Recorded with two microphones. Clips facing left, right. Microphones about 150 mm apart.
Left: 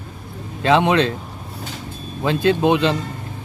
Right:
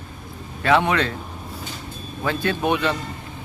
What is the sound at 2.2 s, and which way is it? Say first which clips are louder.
Speech: left 6 dB; 20° left (ahead or behind).